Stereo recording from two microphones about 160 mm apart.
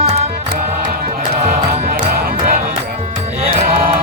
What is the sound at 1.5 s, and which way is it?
Music, 60° right (ahead or behind).